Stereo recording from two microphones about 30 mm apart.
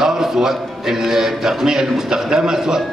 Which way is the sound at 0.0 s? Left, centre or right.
Centre.